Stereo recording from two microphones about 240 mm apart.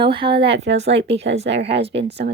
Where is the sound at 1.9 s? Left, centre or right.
Right.